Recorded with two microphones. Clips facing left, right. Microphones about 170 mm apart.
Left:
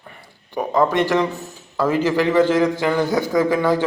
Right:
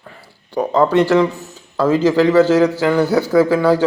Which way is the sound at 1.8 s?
15° left (ahead or behind).